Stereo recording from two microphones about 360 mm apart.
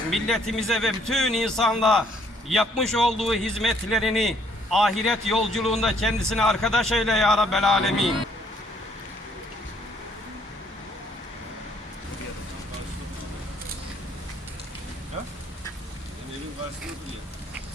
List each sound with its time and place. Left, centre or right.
0.1 s a man's voice: centre